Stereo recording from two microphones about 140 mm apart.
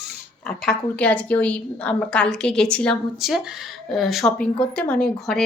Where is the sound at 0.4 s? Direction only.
5° left (ahead or behind).